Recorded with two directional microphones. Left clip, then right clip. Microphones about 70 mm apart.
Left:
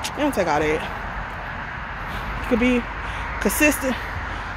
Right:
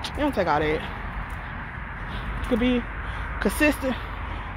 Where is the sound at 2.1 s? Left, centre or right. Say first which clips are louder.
Left 4 dB; left.